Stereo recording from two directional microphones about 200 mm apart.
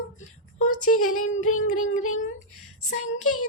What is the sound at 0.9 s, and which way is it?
Child singing, 90° left.